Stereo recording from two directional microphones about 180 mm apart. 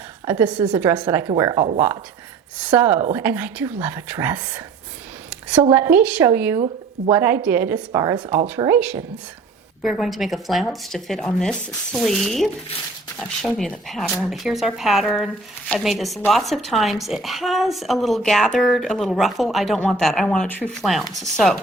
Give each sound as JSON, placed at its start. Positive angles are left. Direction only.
{"t": 0.3, "sound": "speech", "side_deg": -10}
{"t": 1.3, "sound": "speech", "side_deg": -20}
{"t": 2.6, "sound": "speech", "side_deg": -10}
{"t": 5.3, "sound": "a sound", "side_deg": -5}
{"t": 5.7, "sound": "speech", "side_deg": -10}